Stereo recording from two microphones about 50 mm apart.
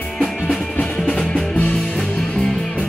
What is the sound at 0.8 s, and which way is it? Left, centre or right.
Music, centre.